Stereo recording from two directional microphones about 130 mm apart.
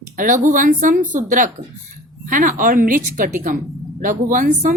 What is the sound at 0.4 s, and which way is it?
A woman's voice, 80° right.